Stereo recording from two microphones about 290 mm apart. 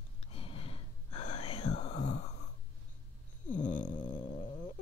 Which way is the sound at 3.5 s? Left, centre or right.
Left.